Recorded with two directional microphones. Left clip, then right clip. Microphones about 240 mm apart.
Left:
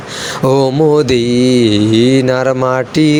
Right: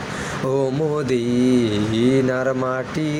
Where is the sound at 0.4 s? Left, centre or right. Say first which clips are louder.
Left 11 dB; left.